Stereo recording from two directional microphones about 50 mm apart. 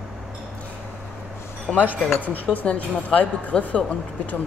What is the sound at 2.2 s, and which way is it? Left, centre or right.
Speech, left.